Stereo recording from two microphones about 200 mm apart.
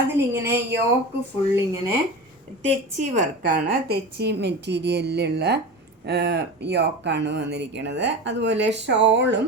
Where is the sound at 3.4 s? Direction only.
50° right (ahead or behind).